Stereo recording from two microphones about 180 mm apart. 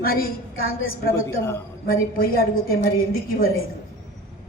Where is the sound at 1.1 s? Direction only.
15° left (ahead or behind).